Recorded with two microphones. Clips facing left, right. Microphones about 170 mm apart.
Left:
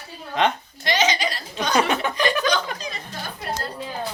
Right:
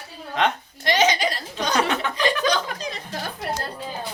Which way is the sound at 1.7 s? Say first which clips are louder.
Left 2 dB; 15° left (ahead or behind).